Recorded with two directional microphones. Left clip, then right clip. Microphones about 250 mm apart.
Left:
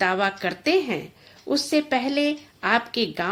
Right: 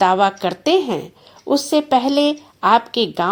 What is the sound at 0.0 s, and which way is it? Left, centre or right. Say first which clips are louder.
A woman's voice: right 8 dB; centre.